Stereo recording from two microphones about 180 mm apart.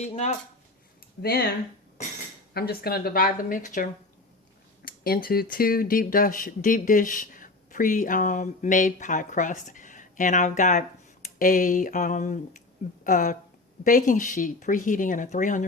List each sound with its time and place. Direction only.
0.0 s speech: 40° left (ahead or behind)
1.2 s a woman's voice: 60° left (ahead or behind)
2.5 s a woman's voice: 60° left (ahead or behind)
4.9 s speech: 55° left (ahead or behind)